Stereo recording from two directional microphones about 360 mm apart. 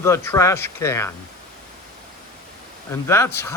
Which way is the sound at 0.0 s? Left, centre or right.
Centre.